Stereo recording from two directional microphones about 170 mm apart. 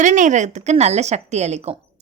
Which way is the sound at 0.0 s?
45° right (ahead or behind).